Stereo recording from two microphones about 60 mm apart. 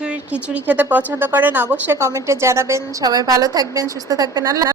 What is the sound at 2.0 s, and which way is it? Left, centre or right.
A woman's voice, right.